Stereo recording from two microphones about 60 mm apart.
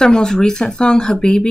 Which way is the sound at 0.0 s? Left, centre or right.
Centre.